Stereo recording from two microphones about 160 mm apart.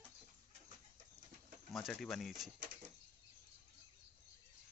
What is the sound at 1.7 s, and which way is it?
Speech, centre (ahead or behind).